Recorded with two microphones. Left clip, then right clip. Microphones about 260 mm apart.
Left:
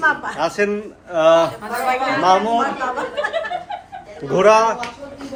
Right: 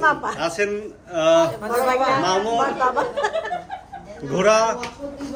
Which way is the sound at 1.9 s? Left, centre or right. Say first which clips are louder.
Left 1 dB; right.